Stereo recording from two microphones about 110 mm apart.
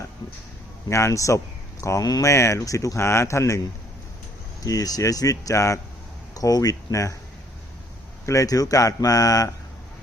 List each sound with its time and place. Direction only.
0.9 s speech: 25° left (ahead or behind)
8.3 s speech: 30° left (ahead or behind)